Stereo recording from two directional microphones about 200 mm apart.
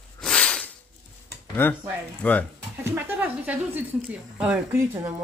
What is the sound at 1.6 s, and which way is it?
Speech, 10° left (ahead or behind).